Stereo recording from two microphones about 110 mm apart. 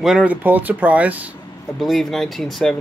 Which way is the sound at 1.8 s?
Centre (ahead or behind).